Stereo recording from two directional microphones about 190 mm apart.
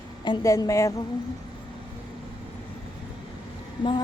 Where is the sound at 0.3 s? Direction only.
20° left (ahead or behind).